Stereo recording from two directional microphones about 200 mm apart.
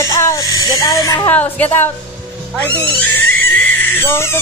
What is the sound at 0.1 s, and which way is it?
Speech, 15° left (ahead or behind).